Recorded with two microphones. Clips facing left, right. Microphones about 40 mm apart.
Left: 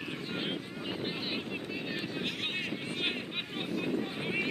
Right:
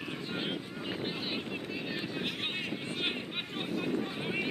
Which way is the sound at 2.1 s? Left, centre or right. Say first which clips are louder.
Even; centre.